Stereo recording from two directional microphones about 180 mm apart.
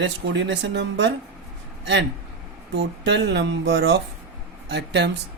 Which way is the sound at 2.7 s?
75° right (ahead or behind).